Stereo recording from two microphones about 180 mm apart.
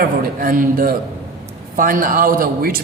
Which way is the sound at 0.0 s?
55° right (ahead or behind).